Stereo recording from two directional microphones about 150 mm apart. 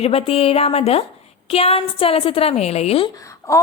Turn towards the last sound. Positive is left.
turn(degrees=20)  # may be behind; listen again after turning